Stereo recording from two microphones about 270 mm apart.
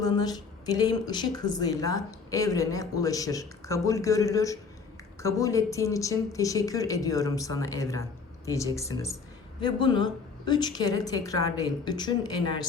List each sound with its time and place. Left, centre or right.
0.0 s a woman's voice: centre